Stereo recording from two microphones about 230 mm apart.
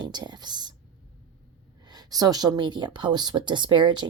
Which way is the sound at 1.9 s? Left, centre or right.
Centre.